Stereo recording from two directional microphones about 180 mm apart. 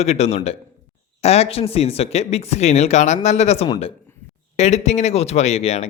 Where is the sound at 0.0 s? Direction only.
35° left (ahead or behind).